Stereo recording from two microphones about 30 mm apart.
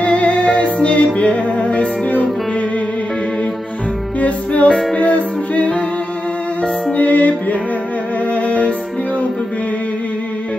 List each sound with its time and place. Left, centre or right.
0.0 s music: left
4.2 s music: left
6.6 s music: left